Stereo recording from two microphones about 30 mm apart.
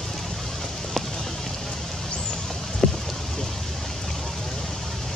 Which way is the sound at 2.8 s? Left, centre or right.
Centre.